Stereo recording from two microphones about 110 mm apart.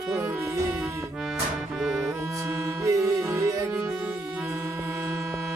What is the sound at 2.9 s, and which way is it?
Music, 30° right (ahead or behind).